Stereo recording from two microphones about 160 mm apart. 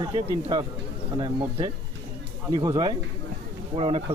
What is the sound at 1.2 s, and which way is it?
Speech, 30° right (ahead or behind).